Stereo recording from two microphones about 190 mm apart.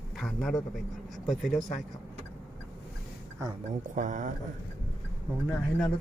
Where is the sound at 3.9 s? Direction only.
40° right (ahead or behind).